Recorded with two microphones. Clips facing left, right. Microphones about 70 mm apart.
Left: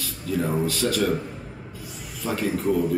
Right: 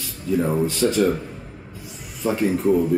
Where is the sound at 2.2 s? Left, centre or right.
Right.